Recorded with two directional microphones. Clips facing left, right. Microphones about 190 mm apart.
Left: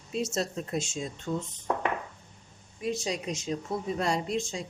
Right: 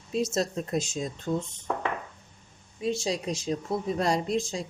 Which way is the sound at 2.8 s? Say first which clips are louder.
Right 3 dB; 30° right (ahead or behind).